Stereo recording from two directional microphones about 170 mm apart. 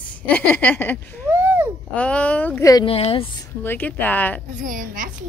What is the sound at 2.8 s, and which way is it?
Speech, 35° left (ahead or behind).